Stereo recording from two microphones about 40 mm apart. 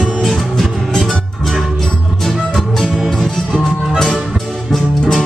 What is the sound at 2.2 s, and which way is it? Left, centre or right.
Music, centre.